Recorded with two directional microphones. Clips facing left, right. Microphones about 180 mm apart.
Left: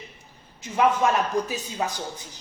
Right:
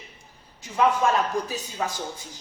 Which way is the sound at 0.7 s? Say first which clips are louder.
Even; 20° left (ahead or behind).